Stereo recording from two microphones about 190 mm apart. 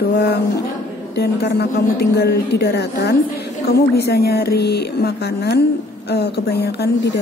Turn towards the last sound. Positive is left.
turn(degrees=55)  # may be behind; listen again after turning